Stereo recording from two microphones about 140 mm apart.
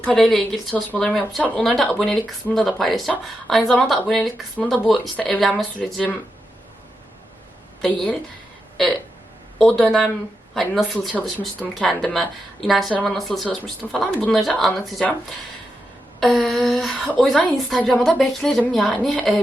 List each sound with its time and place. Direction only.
0.0 s speech: 5° left (ahead or behind)
7.8 s speech: 5° left (ahead or behind)
16.2 s speech: centre (ahead or behind)